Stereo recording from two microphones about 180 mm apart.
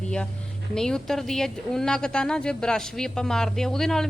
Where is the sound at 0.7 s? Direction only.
5° left (ahead or behind).